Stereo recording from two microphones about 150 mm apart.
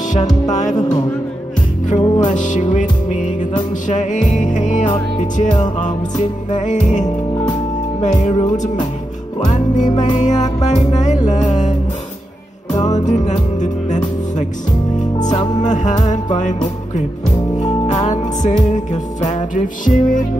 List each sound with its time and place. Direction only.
0.5 s music: 55° left (ahead or behind)
1.9 s music: 55° left (ahead or behind)
12.8 s music: 50° left (ahead or behind)
15.6 s music: 55° left (ahead or behind)